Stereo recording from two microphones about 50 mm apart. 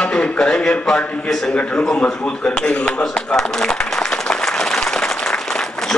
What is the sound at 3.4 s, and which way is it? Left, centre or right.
Applause, centre.